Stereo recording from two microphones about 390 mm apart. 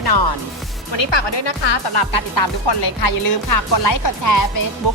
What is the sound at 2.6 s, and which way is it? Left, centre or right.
Speech, left.